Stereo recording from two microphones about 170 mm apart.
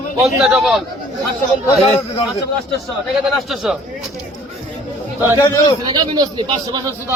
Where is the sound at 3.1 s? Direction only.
Centre (ahead or behind).